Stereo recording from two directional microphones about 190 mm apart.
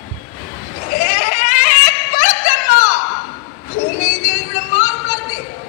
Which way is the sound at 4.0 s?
45° left (ahead or behind).